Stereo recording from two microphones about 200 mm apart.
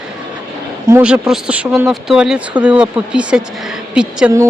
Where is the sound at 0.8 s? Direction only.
10° right (ahead or behind).